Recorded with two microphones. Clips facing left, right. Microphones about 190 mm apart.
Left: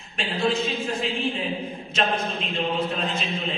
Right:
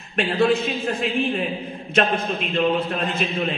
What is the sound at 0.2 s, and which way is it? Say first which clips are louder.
Speech: right 6 dB; 60° right (ahead or behind).